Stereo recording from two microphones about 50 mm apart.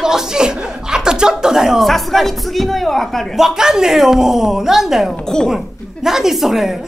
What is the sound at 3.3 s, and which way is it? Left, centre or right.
A woman's voice, centre.